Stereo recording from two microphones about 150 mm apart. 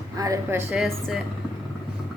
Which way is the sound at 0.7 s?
5° right (ahead or behind).